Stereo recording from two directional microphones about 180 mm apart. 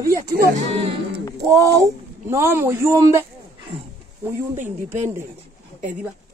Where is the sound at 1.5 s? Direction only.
15° right (ahead or behind).